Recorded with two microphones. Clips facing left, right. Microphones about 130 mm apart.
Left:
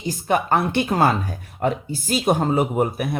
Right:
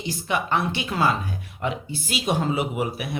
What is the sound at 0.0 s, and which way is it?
Speech, 45° left (ahead or behind).